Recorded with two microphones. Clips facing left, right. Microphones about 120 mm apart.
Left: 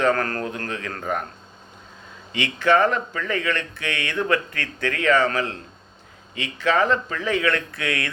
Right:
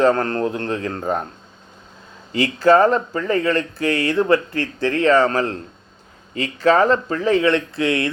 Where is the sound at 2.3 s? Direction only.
35° right (ahead or behind).